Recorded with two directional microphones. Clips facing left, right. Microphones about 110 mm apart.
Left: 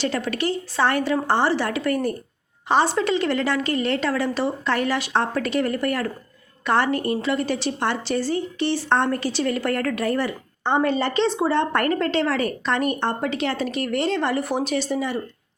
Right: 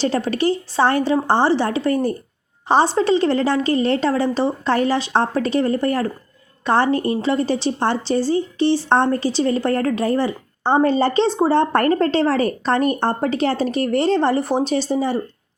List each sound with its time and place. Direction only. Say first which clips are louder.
0.0 s a woman's voice: right 5 dB; 30° right (ahead or behind)